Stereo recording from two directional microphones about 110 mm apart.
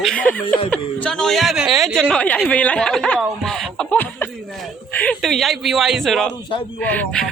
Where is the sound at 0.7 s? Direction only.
10° left (ahead or behind).